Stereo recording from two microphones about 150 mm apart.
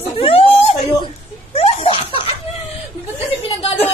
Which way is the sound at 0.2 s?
40° left (ahead or behind).